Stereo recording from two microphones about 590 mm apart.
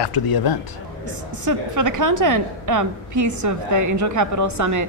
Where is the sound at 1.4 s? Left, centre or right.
Right.